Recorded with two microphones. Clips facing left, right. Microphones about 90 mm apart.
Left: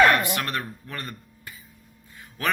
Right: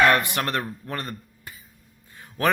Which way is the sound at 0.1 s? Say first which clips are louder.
Right 1 dB; 35° right (ahead or behind).